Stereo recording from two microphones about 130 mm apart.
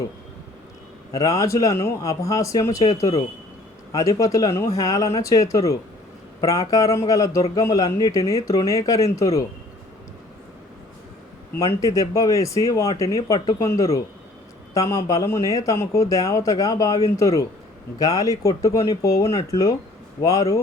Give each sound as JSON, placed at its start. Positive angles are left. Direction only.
{"t": 1.1, "sound": "speech", "side_deg": 25}
{"t": 11.6, "sound": "speech", "side_deg": 25}